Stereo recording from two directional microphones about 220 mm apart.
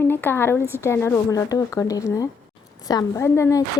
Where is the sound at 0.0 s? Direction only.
10° left (ahead or behind).